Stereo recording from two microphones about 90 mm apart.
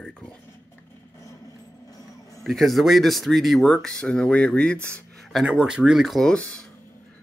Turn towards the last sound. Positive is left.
turn(degrees=15)  # may be behind; listen again after turning